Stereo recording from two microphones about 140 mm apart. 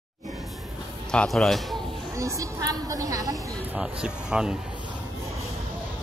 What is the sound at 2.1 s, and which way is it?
A woman's voice, 20° right (ahead or behind).